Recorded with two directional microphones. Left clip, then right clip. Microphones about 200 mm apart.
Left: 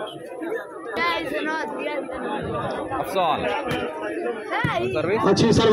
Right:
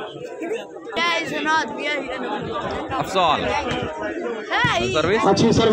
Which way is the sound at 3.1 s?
20° right (ahead or behind).